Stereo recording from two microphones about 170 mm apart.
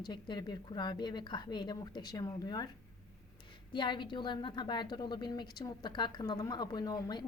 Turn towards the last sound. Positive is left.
turn(degrees=25)  # may be behind; listen again after turning